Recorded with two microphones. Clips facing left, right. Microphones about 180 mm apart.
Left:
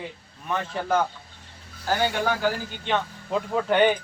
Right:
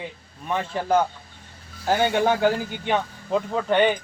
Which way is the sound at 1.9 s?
20° right (ahead or behind).